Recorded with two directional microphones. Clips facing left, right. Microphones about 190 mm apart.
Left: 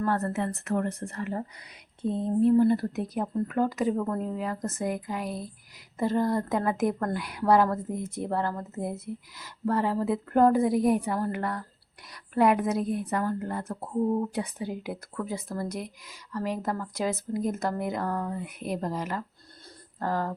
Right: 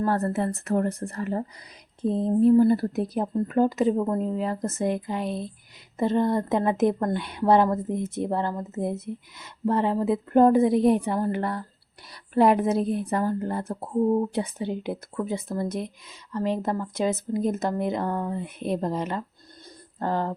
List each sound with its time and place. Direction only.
0.0 s speech: 35° right (ahead or behind)